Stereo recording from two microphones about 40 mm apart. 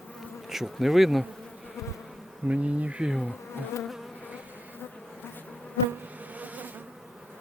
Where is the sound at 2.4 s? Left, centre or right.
Right.